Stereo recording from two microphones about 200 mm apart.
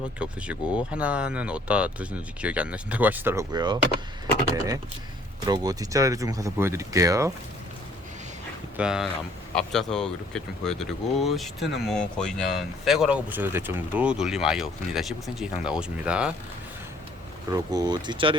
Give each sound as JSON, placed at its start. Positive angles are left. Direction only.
{"t": 0.2, "sound": "speech", "side_deg": -5}
{"t": 8.7, "sound": "speech", "side_deg": -5}
{"t": 17.5, "sound": "speech", "side_deg": -20}